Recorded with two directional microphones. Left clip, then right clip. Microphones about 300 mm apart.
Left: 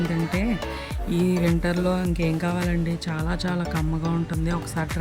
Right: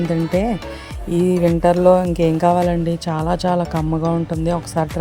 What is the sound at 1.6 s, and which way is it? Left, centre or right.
Speech, right.